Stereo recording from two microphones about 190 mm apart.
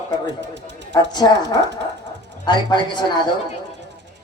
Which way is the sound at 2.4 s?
25° left (ahead or behind).